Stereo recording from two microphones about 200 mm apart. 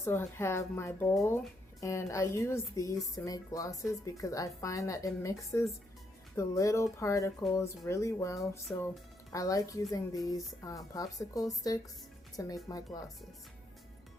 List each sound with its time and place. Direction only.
0.0 s speech: 10° left (ahead or behind)